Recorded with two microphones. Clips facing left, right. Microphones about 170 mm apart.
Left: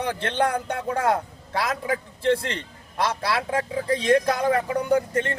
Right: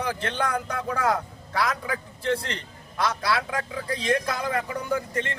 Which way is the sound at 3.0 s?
30° left (ahead or behind).